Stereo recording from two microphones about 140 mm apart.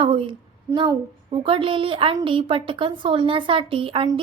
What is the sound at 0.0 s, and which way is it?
A woman's voice, 40° right (ahead or behind).